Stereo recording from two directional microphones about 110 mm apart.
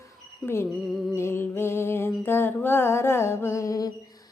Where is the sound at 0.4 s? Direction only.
20° left (ahead or behind).